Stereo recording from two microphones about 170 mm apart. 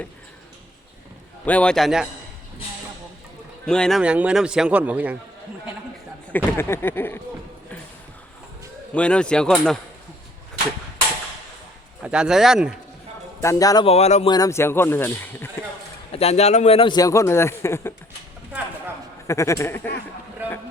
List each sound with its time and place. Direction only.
1.5 s a man's voice: 5° left (ahead or behind)
3.7 s a man's voice: 5° left (ahead or behind)
6.3 s speech: 15° left (ahead or behind)
8.9 s a man's voice: 5° left (ahead or behind)
12.0 s a man's voice: 5° right (ahead or behind)
13.4 s a man's voice: 20° left (ahead or behind)
13.8 s speech: 40° left (ahead or behind)
14.3 s speech: 20° left (ahead or behind)
16.1 s a man's voice: 40° left (ahead or behind); by 17.9 s 15° left (ahead or behind)
19.3 s speech: 15° left (ahead or behind)